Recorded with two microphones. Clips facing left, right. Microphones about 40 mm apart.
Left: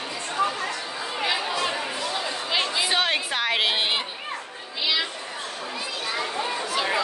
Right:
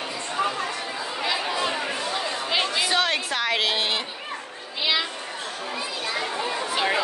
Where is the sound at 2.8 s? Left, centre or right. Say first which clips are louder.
Even; centre.